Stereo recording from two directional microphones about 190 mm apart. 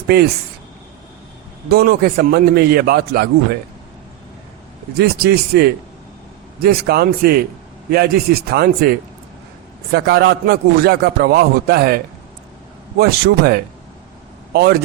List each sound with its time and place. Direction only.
0.1 s a man's voice: 55° right (ahead or behind)
1.7 s a man's voice: 55° right (ahead or behind)
4.9 s a man's voice: 55° right (ahead or behind)
9.9 s a man's voice: 60° right (ahead or behind)
13.0 s a man's voice: 55° right (ahead or behind)